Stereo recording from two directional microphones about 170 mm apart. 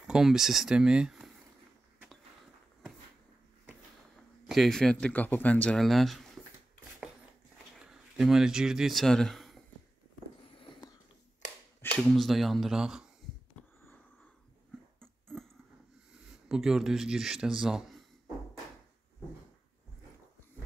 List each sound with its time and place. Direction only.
0.0 s speech: 5° right (ahead or behind)
4.5 s speech: centre (ahead or behind)
7.8 s speech: 5° right (ahead or behind)
10.6 s a sound: 25° left (ahead or behind)
12.0 s speech: centre (ahead or behind)
15.0 s a sound: 5° left (ahead or behind)
16.4 s speech: 5° right (ahead or behind)